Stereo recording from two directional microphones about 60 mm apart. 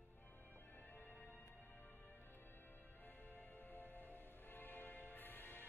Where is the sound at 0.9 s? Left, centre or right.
Left.